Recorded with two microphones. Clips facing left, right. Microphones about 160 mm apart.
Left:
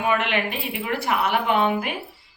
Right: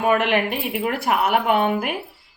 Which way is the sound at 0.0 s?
50° right (ahead or behind).